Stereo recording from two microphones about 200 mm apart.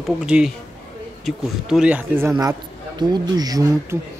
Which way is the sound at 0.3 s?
5° right (ahead or behind).